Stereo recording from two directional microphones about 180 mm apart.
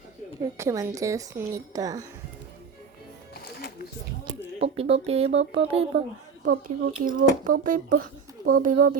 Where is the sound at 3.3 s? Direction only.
60° left (ahead or behind).